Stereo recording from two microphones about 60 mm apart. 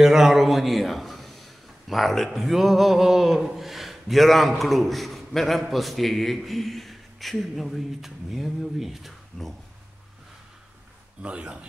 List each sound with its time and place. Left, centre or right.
0.0 s a man's voice: centre
11.2 s a man's voice: centre